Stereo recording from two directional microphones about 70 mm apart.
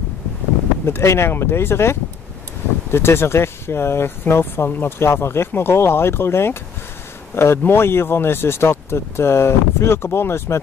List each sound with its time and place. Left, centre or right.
0.8 s speech: left